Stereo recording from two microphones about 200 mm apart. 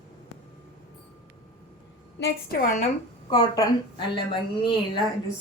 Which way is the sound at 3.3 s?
20° left (ahead or behind).